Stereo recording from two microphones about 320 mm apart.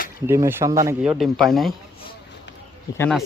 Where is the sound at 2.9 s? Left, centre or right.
Centre.